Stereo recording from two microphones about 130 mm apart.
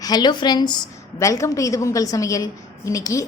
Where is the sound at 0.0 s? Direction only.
30° left (ahead or behind).